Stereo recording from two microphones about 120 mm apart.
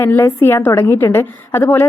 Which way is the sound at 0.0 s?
20° left (ahead or behind).